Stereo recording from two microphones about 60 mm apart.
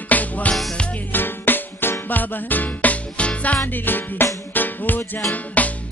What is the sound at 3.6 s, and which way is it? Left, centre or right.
Music, left.